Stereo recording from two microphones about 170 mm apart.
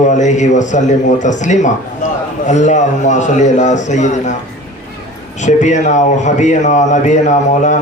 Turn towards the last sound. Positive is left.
turn(degrees=45)  # may be behind; listen again after turning